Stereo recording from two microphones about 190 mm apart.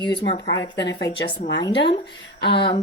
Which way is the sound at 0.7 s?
65° left (ahead or behind).